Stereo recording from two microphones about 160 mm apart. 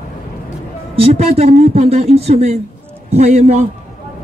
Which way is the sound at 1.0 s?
40° right (ahead or behind).